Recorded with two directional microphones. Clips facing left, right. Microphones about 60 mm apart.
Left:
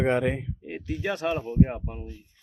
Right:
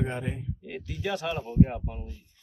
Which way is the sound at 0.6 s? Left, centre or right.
Left.